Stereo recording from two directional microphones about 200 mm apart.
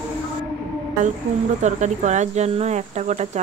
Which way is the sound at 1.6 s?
35° right (ahead or behind).